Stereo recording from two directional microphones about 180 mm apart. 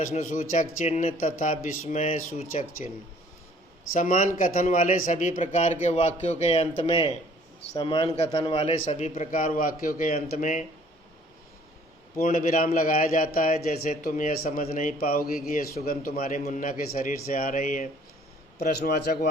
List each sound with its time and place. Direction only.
0.0 s a man's voice: 45° left (ahead or behind)
3.9 s a man's voice: 45° left (ahead or behind)
12.2 s a man's voice: 45° left (ahead or behind)
18.6 s a man's voice: 60° left (ahead or behind)